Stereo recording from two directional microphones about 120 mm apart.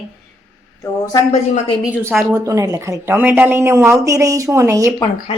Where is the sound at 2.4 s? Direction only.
25° right (ahead or behind).